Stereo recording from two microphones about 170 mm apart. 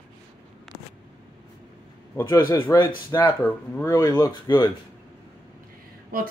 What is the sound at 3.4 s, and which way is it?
Speech, 10° left (ahead or behind).